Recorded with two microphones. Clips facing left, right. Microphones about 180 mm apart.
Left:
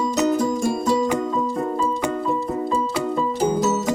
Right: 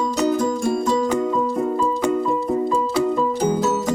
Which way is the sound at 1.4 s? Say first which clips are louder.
Right 2 dB; 10° right (ahead or behind).